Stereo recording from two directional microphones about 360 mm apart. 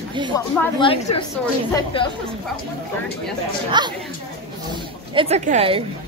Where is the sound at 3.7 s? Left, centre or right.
Centre.